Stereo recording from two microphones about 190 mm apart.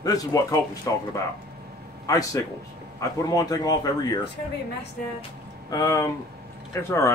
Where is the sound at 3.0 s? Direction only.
20° left (ahead or behind).